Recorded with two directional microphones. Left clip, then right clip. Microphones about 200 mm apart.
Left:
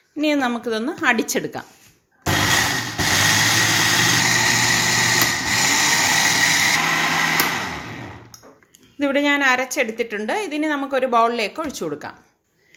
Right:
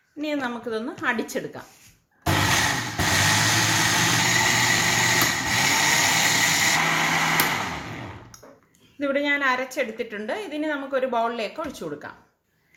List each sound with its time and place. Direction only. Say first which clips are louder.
0.2 s a woman's voice: left 8 dB; 45° left (ahead or behind)
2.2 s a sound: left 3 dB; 5° left (ahead or behind)
3.2 s vehicle: left 5 dB; 5° left (ahead or behind)
9.0 s a woman's voice: left 5 dB; 45° left (ahead or behind)